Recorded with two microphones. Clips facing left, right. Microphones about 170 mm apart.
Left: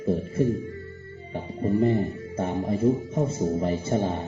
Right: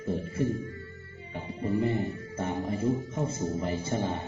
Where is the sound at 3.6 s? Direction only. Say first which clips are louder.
Left 5 dB; 35° left (ahead or behind).